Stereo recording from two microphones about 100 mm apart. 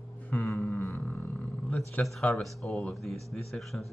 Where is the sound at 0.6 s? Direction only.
20° left (ahead or behind).